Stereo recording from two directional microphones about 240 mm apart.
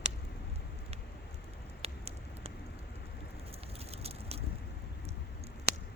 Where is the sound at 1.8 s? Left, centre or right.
Right.